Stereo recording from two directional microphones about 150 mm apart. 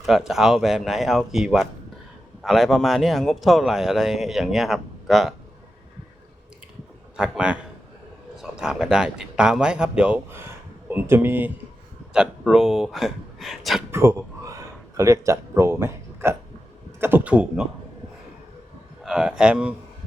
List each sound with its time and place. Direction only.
0.0 s speech: centre (ahead or behind)
7.2 s a man's voice: 5° right (ahead or behind)
13.9 s speech: 20° right (ahead or behind)
19.0 s speech: 5° right (ahead or behind)